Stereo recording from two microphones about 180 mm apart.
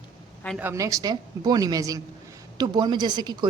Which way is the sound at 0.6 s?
15° right (ahead or behind).